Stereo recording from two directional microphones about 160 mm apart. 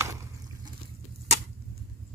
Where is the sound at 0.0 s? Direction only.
20° right (ahead or behind).